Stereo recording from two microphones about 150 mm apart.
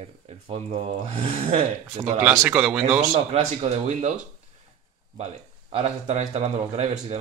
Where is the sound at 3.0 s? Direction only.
45° right (ahead or behind).